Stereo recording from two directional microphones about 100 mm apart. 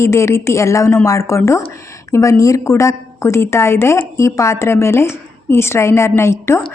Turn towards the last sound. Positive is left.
turn(degrees=25)  # may be behind; listen again after turning